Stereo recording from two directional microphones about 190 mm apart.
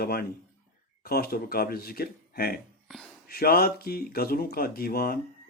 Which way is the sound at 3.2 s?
55° left (ahead or behind).